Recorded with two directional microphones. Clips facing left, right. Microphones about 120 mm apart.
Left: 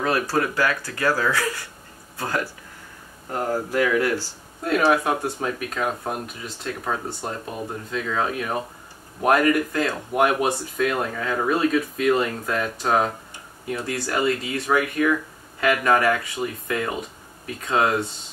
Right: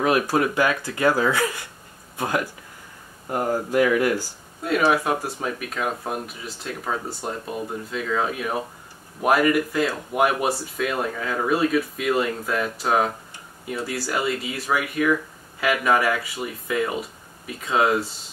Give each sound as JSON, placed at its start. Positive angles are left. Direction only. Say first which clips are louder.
{"t": 0.0, "sound": "speech", "louder": "right 2 dB", "side_deg": -15}
{"t": 4.6, "sound": "speech", "louder": "left 1 dB", "side_deg": 0}